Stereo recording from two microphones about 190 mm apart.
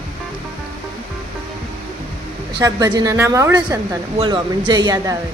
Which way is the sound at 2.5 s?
20° right (ahead or behind).